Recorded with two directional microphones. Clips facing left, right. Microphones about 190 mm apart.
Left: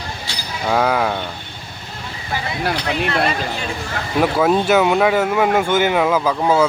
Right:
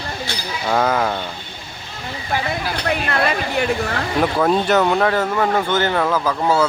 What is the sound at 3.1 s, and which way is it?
Speech, 60° right (ahead or behind).